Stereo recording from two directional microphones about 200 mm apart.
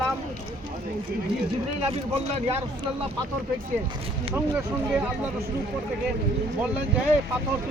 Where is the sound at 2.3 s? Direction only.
30° right (ahead or behind).